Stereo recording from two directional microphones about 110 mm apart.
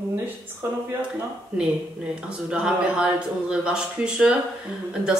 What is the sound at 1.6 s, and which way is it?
Speech, 10° right (ahead or behind).